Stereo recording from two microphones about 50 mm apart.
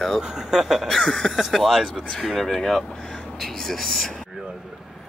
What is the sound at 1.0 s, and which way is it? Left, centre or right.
Speech, centre.